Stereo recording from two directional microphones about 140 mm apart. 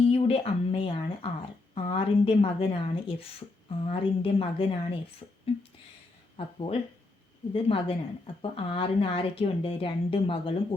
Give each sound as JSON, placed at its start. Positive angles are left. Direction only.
{"t": 0.1, "sound": "a woman's voice", "side_deg": 45}